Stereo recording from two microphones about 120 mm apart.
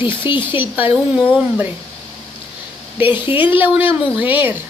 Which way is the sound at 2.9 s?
15° right (ahead or behind).